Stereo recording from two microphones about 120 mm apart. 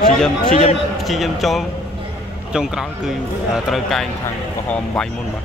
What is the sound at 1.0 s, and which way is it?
A man's voice, centre (ahead or behind).